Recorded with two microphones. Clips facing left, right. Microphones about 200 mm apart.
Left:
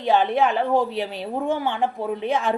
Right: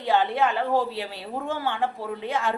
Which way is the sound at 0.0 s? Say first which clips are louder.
Left 3 dB; 20° left (ahead or behind).